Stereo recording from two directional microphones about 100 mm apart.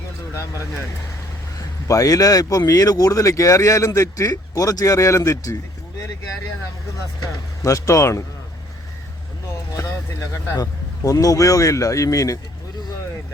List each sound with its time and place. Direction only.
1.9 s speech: 35° left (ahead or behind)
7.2 s speech: 35° left (ahead or behind)
10.6 s speech: 35° left (ahead or behind)